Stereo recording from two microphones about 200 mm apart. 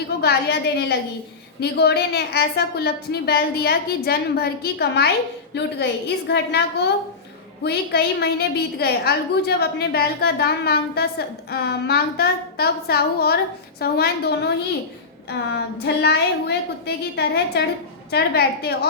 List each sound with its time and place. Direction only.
0.2 s a woman's voice: 55° left (ahead or behind)